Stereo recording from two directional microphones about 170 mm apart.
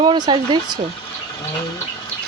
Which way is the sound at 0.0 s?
25° right (ahead or behind).